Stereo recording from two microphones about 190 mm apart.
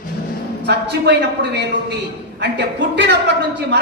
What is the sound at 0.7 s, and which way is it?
A woman's voice, 65° right (ahead or behind).